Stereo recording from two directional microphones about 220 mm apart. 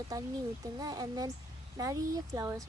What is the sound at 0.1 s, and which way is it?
A child's voice, 15° right (ahead or behind).